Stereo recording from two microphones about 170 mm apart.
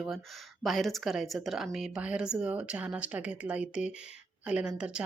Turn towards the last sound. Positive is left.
turn(degrees=-5)  # may be behind; listen again after turning